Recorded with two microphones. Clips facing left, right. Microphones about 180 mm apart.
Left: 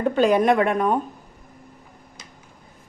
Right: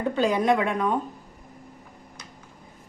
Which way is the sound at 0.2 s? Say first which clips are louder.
Left 5 dB; 60° left (ahead or behind).